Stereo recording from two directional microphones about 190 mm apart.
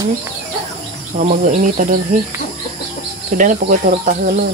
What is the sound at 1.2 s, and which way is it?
Speech, 45° right (ahead or behind).